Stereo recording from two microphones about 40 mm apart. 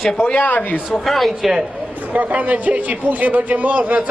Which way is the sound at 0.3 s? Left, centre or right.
Left.